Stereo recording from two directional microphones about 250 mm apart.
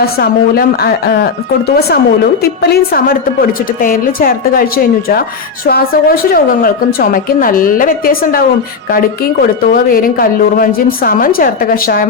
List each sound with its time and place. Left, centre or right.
0.0 s speech: left